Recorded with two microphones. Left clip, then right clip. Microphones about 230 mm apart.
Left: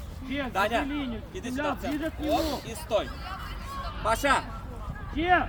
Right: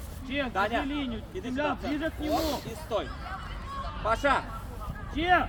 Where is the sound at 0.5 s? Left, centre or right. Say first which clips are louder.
Left 3 dB; left.